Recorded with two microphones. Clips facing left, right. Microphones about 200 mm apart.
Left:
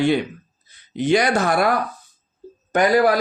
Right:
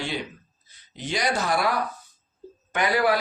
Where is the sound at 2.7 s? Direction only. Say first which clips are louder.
Left 6 dB; 40° left (ahead or behind).